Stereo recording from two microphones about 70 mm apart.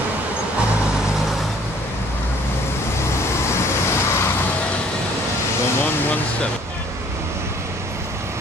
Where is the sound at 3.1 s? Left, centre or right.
Left.